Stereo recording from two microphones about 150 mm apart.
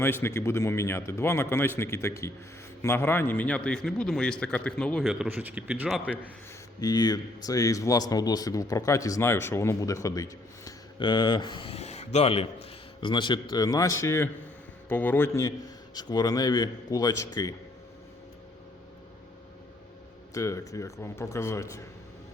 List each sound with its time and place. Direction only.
0.0 s a man's voice: 15° left (ahead or behind)
5.0 s a man's voice: 5° right (ahead or behind)
6.7 s a man's voice: 25° left (ahead or behind); by 12.5 s 45° left (ahead or behind)
13.0 s a man's voice: 30° left (ahead or behind)
20.3 s a man's voice: 20° left (ahead or behind)